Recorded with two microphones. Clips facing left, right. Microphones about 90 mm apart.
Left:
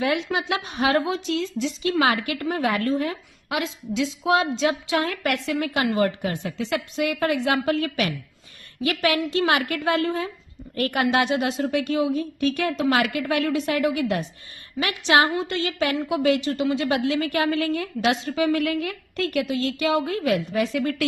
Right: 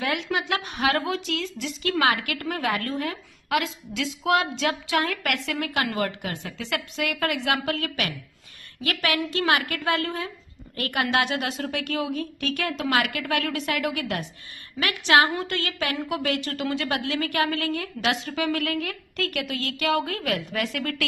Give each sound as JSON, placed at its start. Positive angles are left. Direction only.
{"t": 0.0, "sound": "a woman's voice", "side_deg": 25}